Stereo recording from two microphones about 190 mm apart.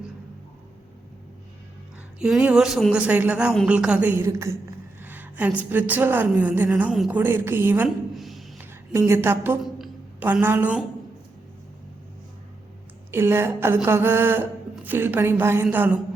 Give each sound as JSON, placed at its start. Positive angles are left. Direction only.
{"t": 2.1, "sound": "a woman's voice", "side_deg": -5}
{"t": 7.2, "sound": "a sound", "side_deg": -10}
{"t": 8.9, "sound": "a woman's voice", "side_deg": -15}
{"t": 9.7, "sound": "music", "side_deg": -5}
{"t": 13.1, "sound": "a woman's voice", "side_deg": -15}